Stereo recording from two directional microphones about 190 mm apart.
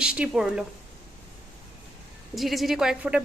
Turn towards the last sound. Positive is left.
turn(degrees=-5)  # may be behind; listen again after turning